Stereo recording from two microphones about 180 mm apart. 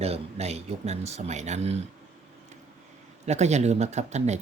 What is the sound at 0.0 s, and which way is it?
Speech, 35° right (ahead or behind).